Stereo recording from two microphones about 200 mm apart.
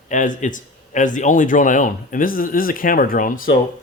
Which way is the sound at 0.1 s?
40° left (ahead or behind).